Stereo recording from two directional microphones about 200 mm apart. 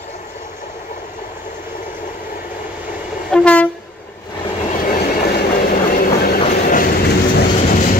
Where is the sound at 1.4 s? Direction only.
40° left (ahead or behind).